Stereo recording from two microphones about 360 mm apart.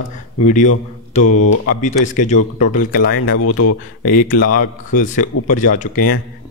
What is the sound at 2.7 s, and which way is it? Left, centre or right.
Speech, left.